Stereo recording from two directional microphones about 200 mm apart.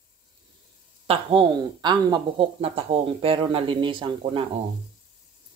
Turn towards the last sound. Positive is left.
turn(degrees=-25)  # may be behind; listen again after turning